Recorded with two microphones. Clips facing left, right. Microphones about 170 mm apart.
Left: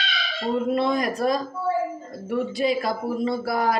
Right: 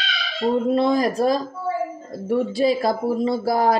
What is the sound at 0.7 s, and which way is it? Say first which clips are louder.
Speech: right 4 dB; 30° right (ahead or behind).